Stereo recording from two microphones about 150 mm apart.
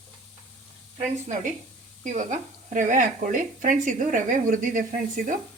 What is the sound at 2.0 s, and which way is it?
Speech, 55° right (ahead or behind).